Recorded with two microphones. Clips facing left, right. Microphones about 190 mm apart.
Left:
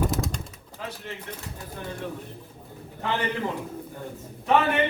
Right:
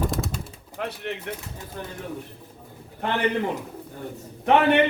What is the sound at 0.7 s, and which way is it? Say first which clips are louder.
Speech: right 6 dB; 70° right (ahead or behind).